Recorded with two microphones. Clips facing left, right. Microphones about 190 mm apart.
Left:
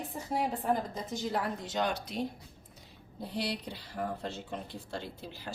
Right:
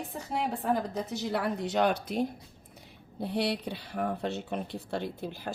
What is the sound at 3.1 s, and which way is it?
Speech, 65° right (ahead or behind).